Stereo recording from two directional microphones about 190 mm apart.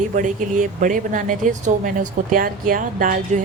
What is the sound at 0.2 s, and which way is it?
Speech, 45° right (ahead or behind).